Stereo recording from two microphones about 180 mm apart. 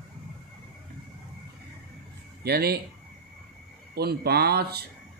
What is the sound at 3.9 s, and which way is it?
Speech, 60° right (ahead or behind).